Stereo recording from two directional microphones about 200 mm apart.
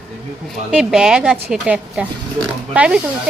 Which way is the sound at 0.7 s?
5° right (ahead or behind).